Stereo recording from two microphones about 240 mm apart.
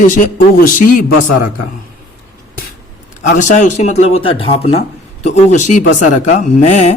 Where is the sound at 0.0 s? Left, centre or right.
Left.